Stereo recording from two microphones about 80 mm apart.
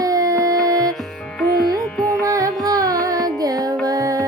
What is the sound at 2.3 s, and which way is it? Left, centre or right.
Music, right.